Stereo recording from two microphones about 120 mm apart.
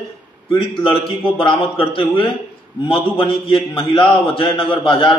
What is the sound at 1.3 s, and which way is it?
A man's voice, 50° left (ahead or behind).